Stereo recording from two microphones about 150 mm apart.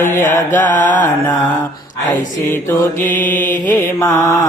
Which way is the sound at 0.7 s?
55° left (ahead or behind).